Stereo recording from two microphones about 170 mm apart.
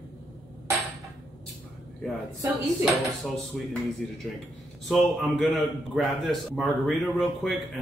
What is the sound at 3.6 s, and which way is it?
Speech, 5° left (ahead or behind).